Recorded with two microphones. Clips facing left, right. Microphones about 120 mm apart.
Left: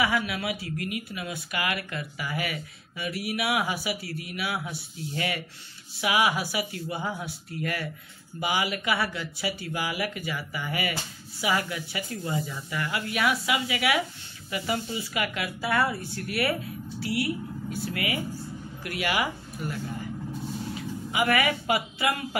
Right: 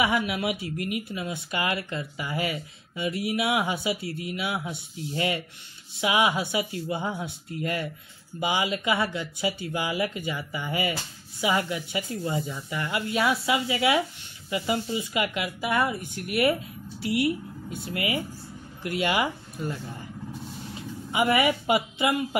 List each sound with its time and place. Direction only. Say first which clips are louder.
0.0 s a woman's voice: right 2 dB; 20° right (ahead or behind)